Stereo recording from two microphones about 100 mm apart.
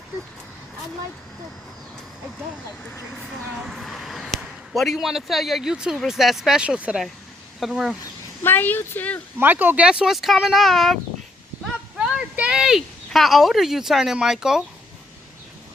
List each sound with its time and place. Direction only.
3.7 s a man's voice: centre (ahead or behind)
8.4 s speech: 20° left (ahead or behind)
9.4 s speech: 20° right (ahead or behind); by 11.0 s centre (ahead or behind)
11.9 s speech: 10° right (ahead or behind)